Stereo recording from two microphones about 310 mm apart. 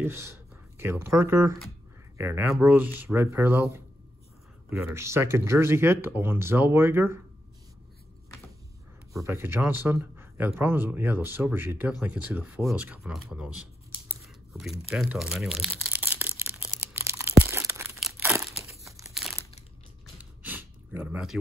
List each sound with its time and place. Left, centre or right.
0.0 s speech: centre
9.1 s speech: centre
14.5 s crumpling: centre
20.2 s gasp: centre